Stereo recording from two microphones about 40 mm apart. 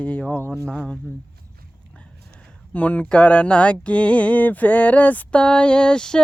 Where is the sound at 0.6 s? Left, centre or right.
Centre.